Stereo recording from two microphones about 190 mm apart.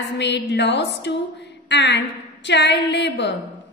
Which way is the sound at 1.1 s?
65° left (ahead or behind).